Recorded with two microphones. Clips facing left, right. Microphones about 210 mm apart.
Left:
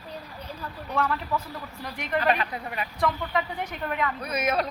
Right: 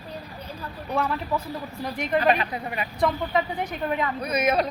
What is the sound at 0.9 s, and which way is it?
Speech, 15° right (ahead or behind).